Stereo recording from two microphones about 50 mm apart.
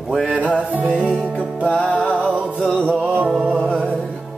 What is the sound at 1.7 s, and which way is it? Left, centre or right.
Music, left.